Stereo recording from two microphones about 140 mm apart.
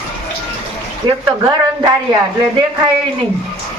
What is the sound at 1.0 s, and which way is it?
Speech, 30° right (ahead or behind).